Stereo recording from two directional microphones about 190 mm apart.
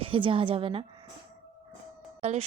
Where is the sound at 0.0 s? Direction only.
30° right (ahead or behind).